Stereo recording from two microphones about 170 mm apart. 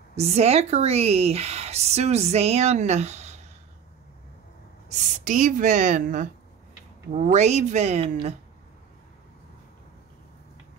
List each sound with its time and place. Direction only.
0.1 s speech: 40° right (ahead or behind)
4.8 s speech: 50° right (ahead or behind)
7.3 s speech: 45° right (ahead or behind)